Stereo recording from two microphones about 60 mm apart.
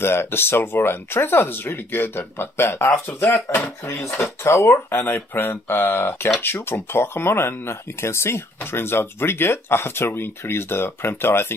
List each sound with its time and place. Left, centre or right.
0.0 s speech: left
4.2 s speech: left
5.1 s speech: left